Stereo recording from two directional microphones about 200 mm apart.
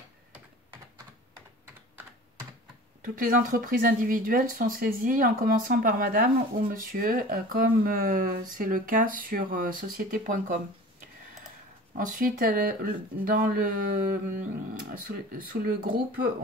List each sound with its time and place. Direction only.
3.0 s speech: 45° right (ahead or behind)
11.9 s speech: 40° right (ahead or behind)